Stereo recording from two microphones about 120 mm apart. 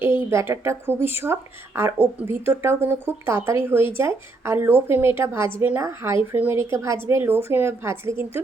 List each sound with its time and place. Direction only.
0.3 s speech: 20° right (ahead or behind)